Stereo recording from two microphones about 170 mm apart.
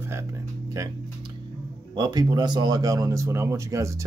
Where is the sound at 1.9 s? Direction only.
25° right (ahead or behind).